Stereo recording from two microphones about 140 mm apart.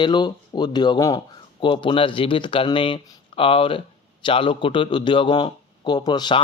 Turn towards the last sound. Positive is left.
turn(degrees=30)  # may be behind; listen again after turning